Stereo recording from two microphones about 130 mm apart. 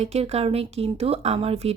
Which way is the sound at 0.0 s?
55° right (ahead or behind).